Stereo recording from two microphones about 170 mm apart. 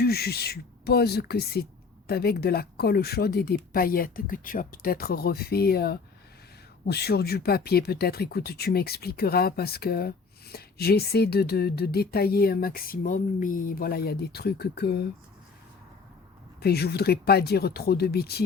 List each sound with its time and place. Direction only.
0.0 s speech: 70° left (ahead or behind)
16.6 s speech: 70° left (ahead or behind)